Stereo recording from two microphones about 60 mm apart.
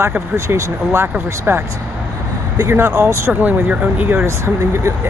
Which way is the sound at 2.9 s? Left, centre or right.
Right.